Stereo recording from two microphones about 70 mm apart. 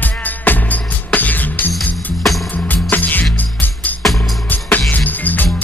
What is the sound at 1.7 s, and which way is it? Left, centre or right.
Music, centre.